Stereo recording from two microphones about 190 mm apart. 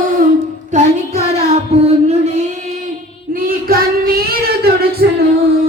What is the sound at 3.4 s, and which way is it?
Child singing, 50° right (ahead or behind).